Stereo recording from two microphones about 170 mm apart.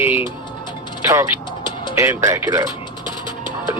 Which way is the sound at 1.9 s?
15° right (ahead or behind).